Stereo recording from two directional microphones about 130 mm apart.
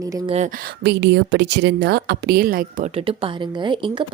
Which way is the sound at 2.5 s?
90° right.